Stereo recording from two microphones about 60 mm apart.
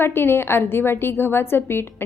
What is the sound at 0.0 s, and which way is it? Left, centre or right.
A woman's voice, left.